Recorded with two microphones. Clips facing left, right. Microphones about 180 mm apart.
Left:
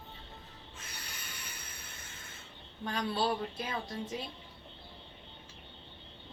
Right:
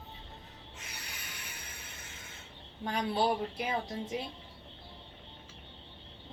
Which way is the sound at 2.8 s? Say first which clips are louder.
Right 2 dB; 20° right (ahead or behind).